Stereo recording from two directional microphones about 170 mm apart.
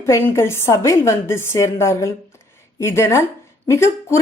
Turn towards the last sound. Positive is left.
turn(degrees=15)  # may be behind; listen again after turning